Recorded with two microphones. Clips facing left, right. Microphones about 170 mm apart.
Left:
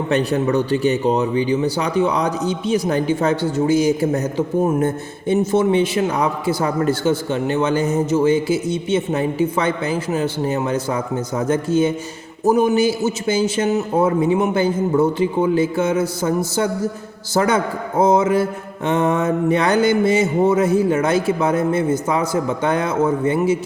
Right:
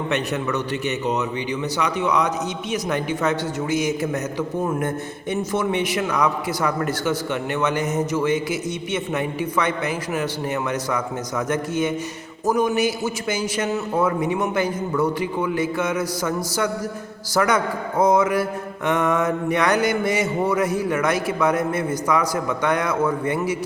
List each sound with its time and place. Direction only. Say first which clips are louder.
0.1 s a man's voice: left 8 dB; 35° left (ahead or behind)